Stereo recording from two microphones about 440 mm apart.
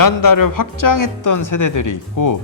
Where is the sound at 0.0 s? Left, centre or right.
Left.